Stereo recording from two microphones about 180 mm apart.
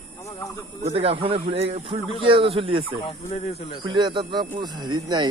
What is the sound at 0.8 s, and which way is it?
Speech, 35° right (ahead or behind).